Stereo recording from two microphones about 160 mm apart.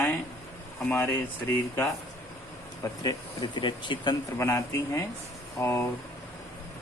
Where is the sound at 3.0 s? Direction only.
25° left (ahead or behind).